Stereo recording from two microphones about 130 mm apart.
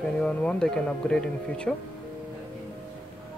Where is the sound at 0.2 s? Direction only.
10° left (ahead or behind).